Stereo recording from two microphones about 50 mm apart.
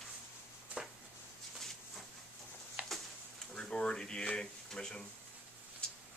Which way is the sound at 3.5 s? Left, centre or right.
Centre.